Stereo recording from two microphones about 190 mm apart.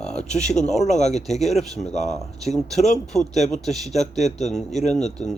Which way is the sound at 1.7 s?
35° left (ahead or behind).